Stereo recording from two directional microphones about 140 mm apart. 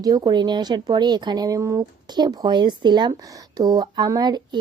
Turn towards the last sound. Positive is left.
turn(degrees=-30)  # may be behind; listen again after turning